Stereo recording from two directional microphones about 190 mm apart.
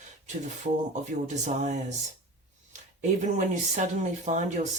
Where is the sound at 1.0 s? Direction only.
40° right (ahead or behind).